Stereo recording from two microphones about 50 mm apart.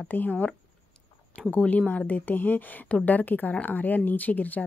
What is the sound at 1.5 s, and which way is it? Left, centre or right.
Speech, left.